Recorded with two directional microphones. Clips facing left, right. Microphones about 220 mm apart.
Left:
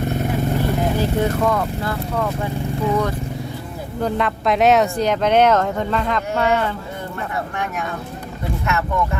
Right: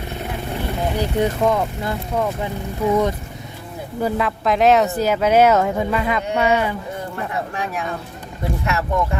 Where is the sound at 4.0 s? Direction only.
5° right (ahead or behind).